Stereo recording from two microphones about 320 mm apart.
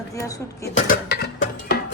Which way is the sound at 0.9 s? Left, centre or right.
Left.